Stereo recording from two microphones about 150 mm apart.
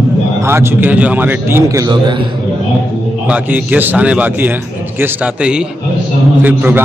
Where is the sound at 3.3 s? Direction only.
10° right (ahead or behind).